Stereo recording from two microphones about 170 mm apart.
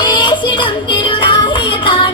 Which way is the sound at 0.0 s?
25° left (ahead or behind).